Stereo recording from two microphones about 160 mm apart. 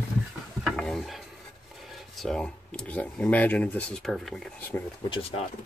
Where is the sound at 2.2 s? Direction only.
5° left (ahead or behind).